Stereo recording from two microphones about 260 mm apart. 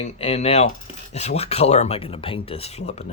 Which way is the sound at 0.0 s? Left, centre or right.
Left.